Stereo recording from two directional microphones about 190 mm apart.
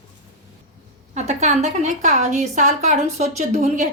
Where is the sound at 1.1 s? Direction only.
35° right (ahead or behind).